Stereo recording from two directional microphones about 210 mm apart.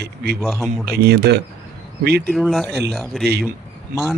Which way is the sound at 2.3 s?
Centre (ahead or behind).